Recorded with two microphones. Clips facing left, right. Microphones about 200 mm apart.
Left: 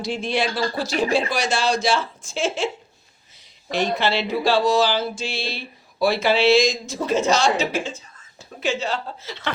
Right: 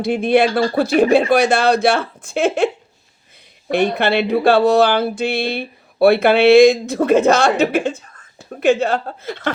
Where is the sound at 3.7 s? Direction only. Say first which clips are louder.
Right 6 dB; 60° right (ahead or behind).